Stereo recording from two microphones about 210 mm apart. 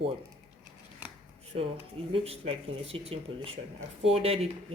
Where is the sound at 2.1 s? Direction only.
25° right (ahead or behind).